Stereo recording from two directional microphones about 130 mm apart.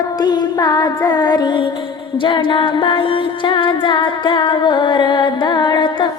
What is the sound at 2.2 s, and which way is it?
Music, 35° left (ahead or behind).